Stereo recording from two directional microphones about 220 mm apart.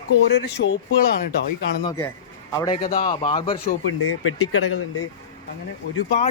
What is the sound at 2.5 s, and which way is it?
Speech, 15° left (ahead or behind).